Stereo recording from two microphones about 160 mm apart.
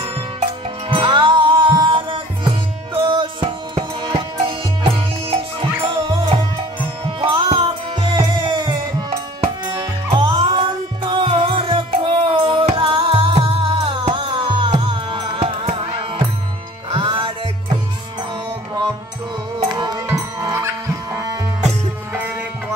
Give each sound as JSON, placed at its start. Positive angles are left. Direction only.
{"t": 0.8, "sound": "music", "side_deg": -30}
{"t": 10.0, "sound": "music", "side_deg": -30}
{"t": 19.7, "sound": "music", "side_deg": -25}